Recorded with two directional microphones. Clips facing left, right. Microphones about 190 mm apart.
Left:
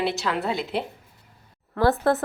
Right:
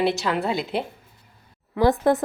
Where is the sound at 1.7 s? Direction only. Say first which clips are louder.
Right 2 dB; 15° right (ahead or behind).